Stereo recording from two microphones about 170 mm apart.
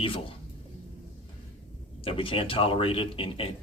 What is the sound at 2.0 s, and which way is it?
Speech, 30° left (ahead or behind).